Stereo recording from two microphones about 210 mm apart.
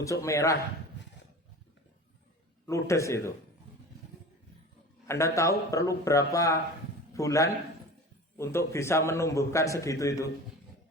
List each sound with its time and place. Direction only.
0.0 s a man's voice: 15° left (ahead or behind)
2.6 s a man's voice: 15° left (ahead or behind)
5.0 s a man's voice: 15° left (ahead or behind)